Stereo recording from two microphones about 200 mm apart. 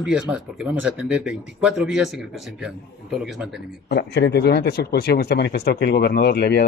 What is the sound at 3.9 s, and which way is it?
Speech, 60° left (ahead or behind).